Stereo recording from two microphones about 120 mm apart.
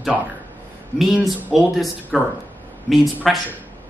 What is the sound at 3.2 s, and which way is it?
Speech, centre (ahead or behind).